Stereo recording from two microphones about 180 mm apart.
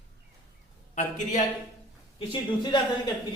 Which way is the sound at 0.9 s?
45° left (ahead or behind).